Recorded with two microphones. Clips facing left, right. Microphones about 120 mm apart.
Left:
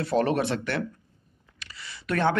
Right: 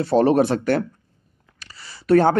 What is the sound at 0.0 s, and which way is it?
Speech, 35° right (ahead or behind).